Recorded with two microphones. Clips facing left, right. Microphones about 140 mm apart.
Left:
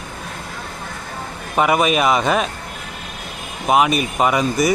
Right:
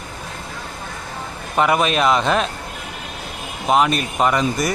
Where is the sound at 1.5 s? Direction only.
5° left (ahead or behind).